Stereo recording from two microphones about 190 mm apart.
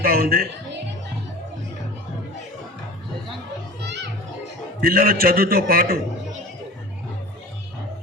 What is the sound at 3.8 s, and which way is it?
Children playing, 65° right (ahead or behind).